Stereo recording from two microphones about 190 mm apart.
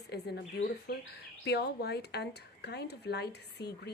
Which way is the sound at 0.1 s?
60° left (ahead or behind).